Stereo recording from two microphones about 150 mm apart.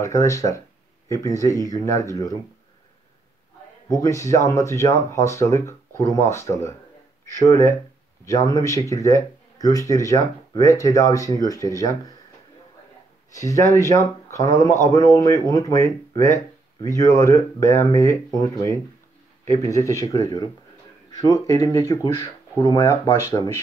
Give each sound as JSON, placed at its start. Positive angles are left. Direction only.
{"t": 0.0, "sound": "speech", "side_deg": 20}
{"t": 3.9, "sound": "speech", "side_deg": 20}
{"t": 13.3, "sound": "speech", "side_deg": 20}